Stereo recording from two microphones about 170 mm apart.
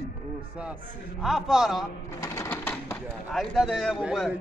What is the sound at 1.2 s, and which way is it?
Speech, centre (ahead or behind).